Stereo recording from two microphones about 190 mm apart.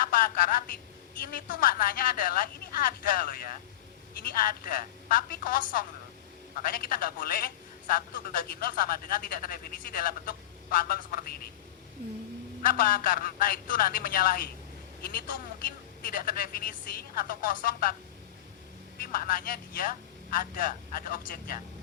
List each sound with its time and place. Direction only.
0.0 s a woman's voice: 50° left (ahead or behind)
12.6 s speech: 50° left (ahead or behind)
16.0 s speech: 50° left (ahead or behind)
18.9 s speech: 50° left (ahead or behind)